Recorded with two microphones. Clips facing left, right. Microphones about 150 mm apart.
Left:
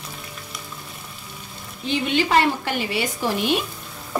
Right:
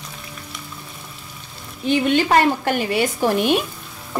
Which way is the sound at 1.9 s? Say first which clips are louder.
Right 4 dB; 50° right (ahead or behind).